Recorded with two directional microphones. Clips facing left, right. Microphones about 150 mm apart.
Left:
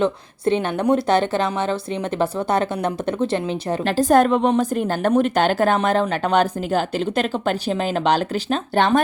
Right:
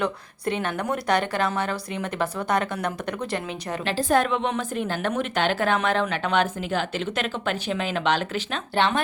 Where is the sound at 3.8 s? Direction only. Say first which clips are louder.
Left 6 dB; 45° left (ahead or behind).